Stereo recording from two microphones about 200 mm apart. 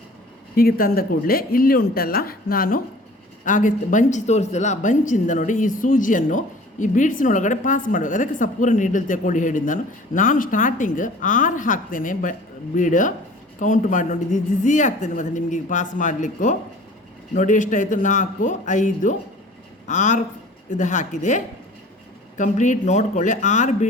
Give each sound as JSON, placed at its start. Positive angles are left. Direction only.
{"t": 0.5, "sound": "speech", "side_deg": 45}